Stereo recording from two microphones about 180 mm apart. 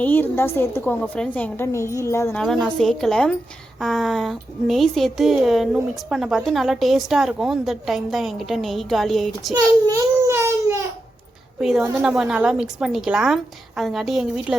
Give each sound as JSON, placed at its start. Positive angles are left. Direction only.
{"t": 0.0, "sound": "a woman's voice", "side_deg": 10}
{"t": 2.4, "sound": "a woman's voice", "side_deg": 0}
{"t": 9.5, "sound": "child singing", "side_deg": -20}
{"t": 11.6, "sound": "a woman's voice", "side_deg": -5}